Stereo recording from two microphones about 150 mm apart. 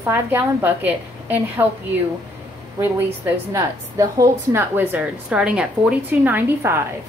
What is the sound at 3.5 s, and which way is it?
A woman's voice, 20° right (ahead or behind).